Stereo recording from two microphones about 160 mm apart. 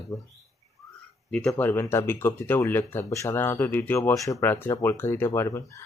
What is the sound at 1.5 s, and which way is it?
Speech, 15° left (ahead or behind).